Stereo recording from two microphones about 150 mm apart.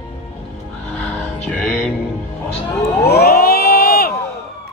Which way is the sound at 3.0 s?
90° left.